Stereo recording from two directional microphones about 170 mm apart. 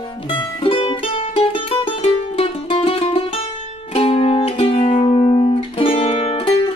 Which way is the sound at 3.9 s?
35° left (ahead or behind).